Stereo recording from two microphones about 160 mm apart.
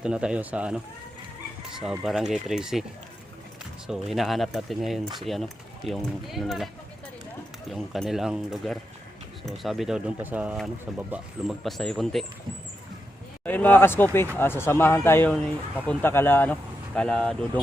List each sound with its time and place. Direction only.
0.0 s speech: 5° right (ahead or behind)
3.8 s speech: centre (ahead or behind)
7.7 s speech: centre (ahead or behind)
13.4 s speech: 10° left (ahead or behind)